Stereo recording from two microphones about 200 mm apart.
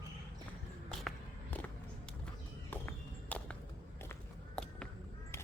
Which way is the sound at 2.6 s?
10° left (ahead or behind).